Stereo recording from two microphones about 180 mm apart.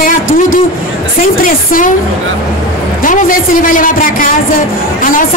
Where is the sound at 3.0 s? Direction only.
50° left (ahead or behind).